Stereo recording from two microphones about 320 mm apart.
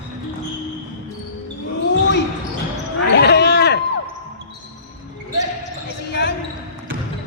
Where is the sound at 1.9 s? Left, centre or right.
Left.